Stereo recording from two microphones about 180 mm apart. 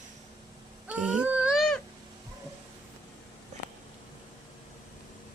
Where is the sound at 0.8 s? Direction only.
5° right (ahead or behind).